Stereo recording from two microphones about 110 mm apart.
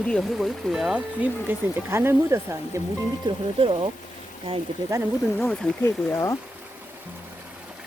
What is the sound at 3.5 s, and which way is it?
Speech, 55° right (ahead or behind).